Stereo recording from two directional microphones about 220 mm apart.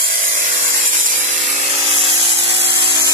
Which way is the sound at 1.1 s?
30° right (ahead or behind).